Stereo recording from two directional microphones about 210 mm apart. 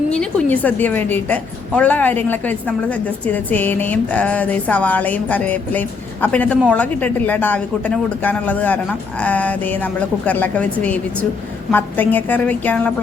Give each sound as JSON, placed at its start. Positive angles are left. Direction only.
{"t": 0.1, "sound": "a woman's voice", "side_deg": 5}